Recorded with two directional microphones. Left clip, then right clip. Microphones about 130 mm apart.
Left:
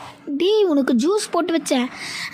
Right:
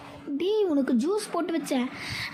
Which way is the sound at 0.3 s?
55° left (ahead or behind).